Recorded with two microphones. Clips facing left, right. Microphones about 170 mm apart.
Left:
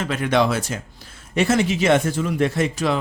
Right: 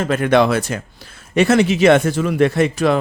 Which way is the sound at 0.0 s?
50° right (ahead or behind).